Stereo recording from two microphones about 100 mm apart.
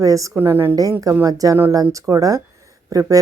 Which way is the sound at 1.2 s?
35° right (ahead or behind).